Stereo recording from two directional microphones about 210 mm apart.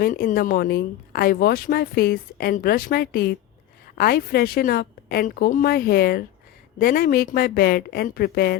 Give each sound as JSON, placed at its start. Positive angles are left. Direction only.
{"t": 0.0, "sound": "speech", "side_deg": 40}